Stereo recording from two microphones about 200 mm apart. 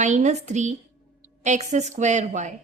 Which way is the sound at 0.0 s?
35° right (ahead or behind).